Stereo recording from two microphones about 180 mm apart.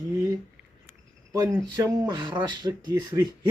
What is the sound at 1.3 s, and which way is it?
A man's voice, 25° right (ahead or behind).